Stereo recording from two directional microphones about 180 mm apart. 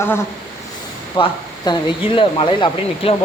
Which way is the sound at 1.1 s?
30° left (ahead or behind).